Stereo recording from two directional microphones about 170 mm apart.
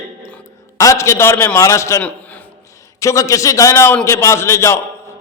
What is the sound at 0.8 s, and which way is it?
A man's voice, 15° left (ahead or behind).